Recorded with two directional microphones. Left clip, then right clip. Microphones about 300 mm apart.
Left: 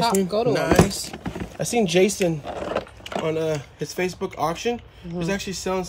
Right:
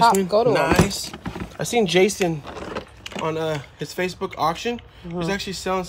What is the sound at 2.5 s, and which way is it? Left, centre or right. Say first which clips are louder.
Keys jangling: left 5 dB; centre.